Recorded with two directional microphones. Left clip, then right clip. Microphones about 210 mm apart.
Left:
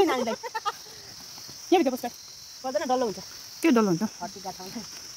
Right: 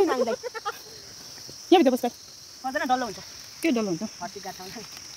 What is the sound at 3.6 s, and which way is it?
Speech, 15° left (ahead or behind).